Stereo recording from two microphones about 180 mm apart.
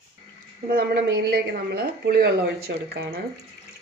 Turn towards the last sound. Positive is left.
turn(degrees=-60)  # may be behind; listen again after turning